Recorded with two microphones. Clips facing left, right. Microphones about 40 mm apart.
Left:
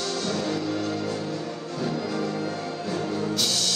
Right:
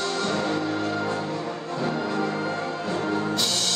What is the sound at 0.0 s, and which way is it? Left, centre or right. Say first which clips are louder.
Music: right 2 dB; right.